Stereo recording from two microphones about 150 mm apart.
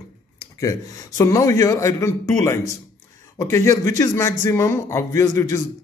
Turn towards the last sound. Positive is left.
turn(degrees=20)  # may be behind; listen again after turning